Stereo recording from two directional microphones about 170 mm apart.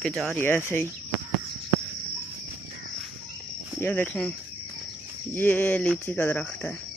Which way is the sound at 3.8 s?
10° left (ahead or behind).